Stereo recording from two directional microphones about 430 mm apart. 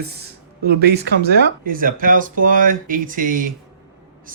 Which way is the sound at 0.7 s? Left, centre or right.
Right.